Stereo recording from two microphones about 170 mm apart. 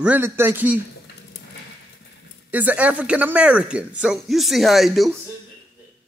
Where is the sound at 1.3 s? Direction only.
75° left (ahead or behind).